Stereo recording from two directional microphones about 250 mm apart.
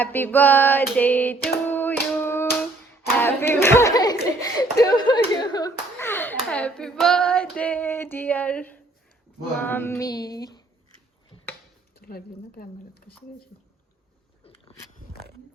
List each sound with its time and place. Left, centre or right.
0.0 s speech: centre
1.6 s hands: centre
3.2 s speech: centre
11.9 s speech: left
14.4 s a sound: left